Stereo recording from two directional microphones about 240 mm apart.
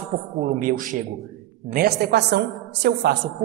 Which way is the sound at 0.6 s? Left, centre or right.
Right.